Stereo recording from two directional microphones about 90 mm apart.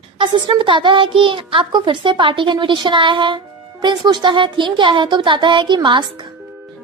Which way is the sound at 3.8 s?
55° right (ahead or behind).